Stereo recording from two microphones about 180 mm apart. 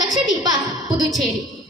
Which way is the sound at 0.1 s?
20° right (ahead or behind).